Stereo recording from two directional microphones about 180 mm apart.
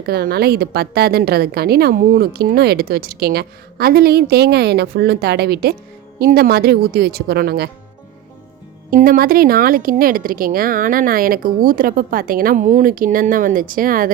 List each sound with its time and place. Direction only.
0.0 s a woman's voice: 55° right (ahead or behind)
8.9 s speech: 50° right (ahead or behind)